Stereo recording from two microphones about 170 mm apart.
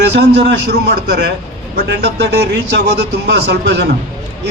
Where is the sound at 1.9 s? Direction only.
85° right.